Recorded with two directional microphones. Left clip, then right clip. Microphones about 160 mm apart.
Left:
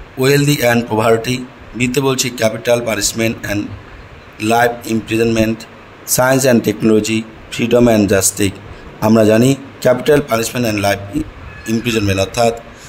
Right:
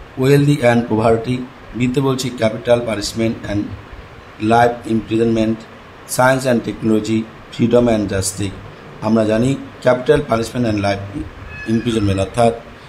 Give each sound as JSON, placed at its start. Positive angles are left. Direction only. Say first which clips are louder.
{"t": 0.2, "sound": "a man's voice", "louder": "left 1 dB", "side_deg": 60}